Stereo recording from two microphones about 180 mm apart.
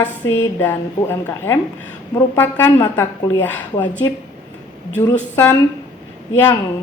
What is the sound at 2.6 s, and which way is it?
Speech, 25° left (ahead or behind).